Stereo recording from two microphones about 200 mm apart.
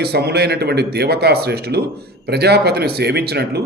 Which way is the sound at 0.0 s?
55° right (ahead or behind).